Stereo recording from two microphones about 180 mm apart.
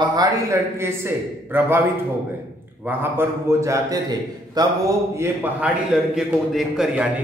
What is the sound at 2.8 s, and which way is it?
A man's voice, 10° right (ahead or behind).